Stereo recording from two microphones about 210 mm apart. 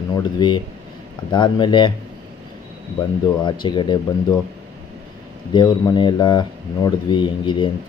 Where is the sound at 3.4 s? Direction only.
20° left (ahead or behind).